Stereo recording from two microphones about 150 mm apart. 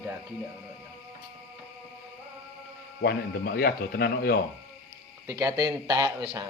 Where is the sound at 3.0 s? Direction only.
90° left.